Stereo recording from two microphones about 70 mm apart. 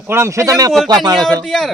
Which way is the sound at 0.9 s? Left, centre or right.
Right.